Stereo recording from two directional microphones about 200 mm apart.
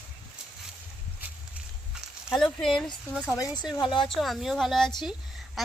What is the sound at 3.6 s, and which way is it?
Speech, 20° left (ahead or behind).